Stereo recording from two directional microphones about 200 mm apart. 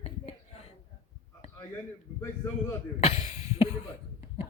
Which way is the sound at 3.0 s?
30° left (ahead or behind).